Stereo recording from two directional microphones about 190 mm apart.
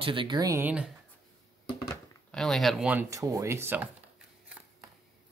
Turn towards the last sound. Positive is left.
turn(degrees=-10)  # may be behind; listen again after turning